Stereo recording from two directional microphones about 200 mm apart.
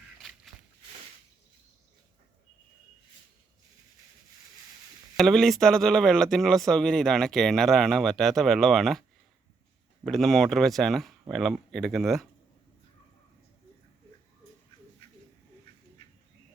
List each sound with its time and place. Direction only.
0.2 s walk: centre (ahead or behind)
5.1 s speech: centre (ahead or behind)
10.1 s speech: centre (ahead or behind)